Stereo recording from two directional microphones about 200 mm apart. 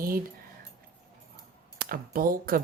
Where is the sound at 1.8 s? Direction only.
45° right (ahead or behind).